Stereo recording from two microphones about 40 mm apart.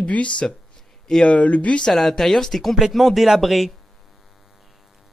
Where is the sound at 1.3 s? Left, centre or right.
Left.